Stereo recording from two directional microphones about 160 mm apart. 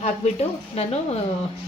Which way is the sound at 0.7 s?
40° left (ahead or behind).